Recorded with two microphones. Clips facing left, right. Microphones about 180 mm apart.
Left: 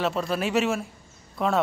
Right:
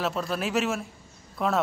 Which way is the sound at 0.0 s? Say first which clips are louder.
Left 3 dB; centre (ahead or behind).